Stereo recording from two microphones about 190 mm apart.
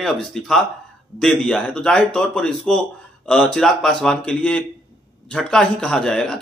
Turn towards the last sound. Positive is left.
turn(degrees=5)  # may be behind; listen again after turning